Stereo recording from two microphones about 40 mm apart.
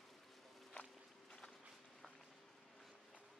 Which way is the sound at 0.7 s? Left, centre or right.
Left.